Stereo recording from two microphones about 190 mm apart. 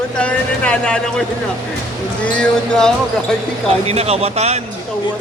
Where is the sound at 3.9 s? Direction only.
35° right (ahead or behind).